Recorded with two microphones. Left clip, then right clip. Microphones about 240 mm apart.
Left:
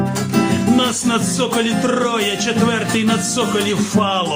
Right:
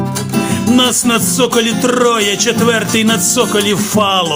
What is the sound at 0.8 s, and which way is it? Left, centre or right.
Music, right.